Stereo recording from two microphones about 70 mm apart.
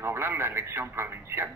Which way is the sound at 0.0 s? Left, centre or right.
Right.